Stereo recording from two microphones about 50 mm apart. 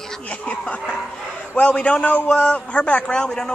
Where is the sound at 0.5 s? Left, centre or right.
Left.